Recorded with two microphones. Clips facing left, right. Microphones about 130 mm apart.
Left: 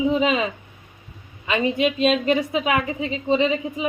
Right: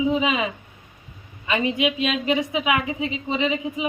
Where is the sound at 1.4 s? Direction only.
25° left (ahead or behind).